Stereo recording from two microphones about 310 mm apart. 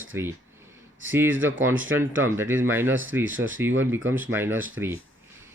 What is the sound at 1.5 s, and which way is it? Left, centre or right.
Speech, right.